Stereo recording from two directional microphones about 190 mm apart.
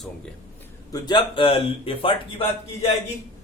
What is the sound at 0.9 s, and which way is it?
Speech, 20° left (ahead or behind).